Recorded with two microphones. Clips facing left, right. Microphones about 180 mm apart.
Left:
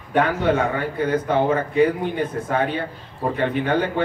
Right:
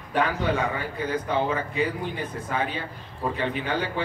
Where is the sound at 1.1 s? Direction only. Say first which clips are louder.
Left 6 dB; 55° left (ahead or behind).